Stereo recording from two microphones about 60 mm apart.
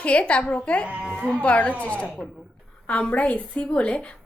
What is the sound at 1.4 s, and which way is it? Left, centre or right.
A woman's voice, left.